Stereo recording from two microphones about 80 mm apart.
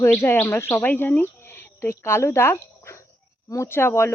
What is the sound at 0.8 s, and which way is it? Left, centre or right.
Speech, left.